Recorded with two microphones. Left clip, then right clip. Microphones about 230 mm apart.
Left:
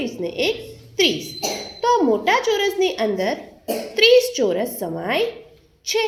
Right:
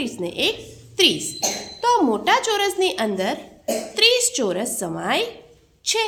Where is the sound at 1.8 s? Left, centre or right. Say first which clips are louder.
Even; centre.